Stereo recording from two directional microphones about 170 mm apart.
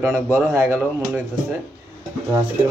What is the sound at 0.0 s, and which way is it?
A man's voice, 5° right (ahead or behind).